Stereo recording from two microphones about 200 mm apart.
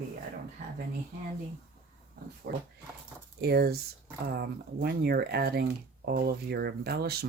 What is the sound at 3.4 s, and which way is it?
Speech, 50° right (ahead or behind).